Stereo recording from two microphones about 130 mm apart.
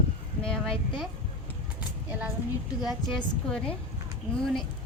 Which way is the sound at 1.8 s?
10° right (ahead or behind).